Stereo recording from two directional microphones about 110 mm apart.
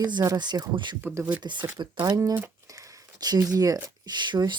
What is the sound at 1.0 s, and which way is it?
Speech, 20° right (ahead or behind).